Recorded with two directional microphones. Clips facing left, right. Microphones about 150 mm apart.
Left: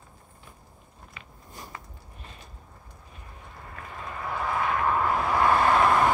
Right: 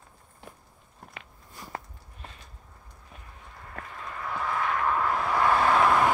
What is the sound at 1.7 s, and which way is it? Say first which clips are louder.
Biting: right 10 dB; 65° right (ahead or behind).